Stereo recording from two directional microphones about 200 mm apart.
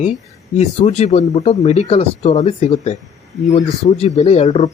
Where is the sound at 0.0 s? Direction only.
35° left (ahead or behind).